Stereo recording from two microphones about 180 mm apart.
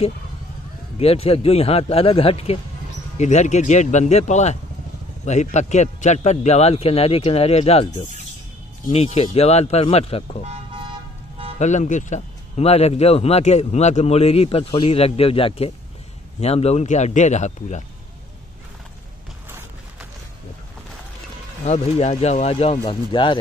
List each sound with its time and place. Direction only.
0.9 s speech: 35° left (ahead or behind)
8.9 s speech: 35° left (ahead or behind)
10.4 s toot: 30° right (ahead or behind)
11.5 s speech: 40° left (ahead or behind)
21.6 s speech: 35° left (ahead or behind)